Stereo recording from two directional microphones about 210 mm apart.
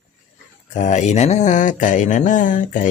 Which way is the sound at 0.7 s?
35° left (ahead or behind).